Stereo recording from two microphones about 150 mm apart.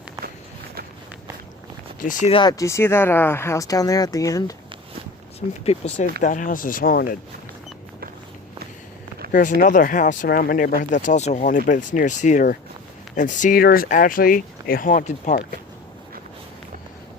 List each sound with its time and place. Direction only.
2.0 s speech: 65° left (ahead or behind)
2.3 s speech: 25° left (ahead or behind)
5.6 s speech: 50° left (ahead or behind); by 7.2 s 70° left (ahead or behind)
9.3 s speech: 60° left (ahead or behind)